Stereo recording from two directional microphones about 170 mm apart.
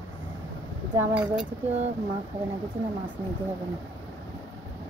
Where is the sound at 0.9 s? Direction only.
15° right (ahead or behind).